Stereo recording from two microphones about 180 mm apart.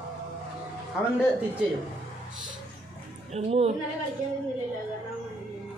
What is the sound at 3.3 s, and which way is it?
Speech, 35° right (ahead or behind).